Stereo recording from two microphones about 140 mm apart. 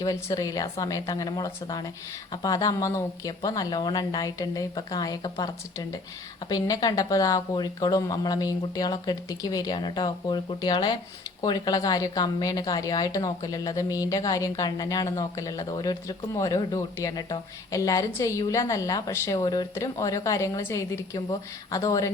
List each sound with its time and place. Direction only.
0.0 s a woman's voice: 25° left (ahead or behind)